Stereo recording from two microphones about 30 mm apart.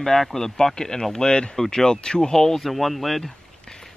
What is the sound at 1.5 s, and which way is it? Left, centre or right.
Speech, centre.